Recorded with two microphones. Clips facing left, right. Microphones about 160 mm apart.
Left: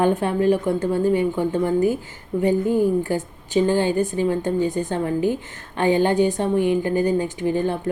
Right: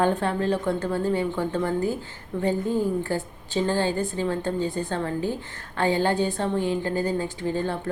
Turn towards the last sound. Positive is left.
turn(degrees=15)  # may be behind; listen again after turning